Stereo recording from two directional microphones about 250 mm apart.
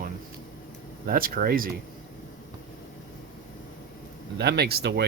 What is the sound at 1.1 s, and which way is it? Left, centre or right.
Speech, right.